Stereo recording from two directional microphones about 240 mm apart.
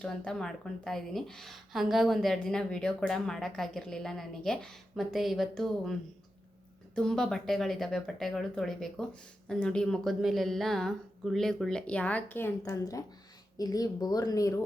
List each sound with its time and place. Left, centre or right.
0.0 s a woman's voice: centre